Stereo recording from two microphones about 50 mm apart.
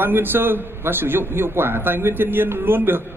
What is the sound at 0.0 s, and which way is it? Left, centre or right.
A man's voice, right.